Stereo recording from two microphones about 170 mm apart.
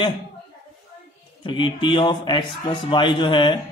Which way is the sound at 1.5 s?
30° left (ahead or behind).